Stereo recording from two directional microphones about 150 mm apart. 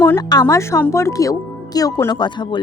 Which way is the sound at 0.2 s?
25° left (ahead or behind).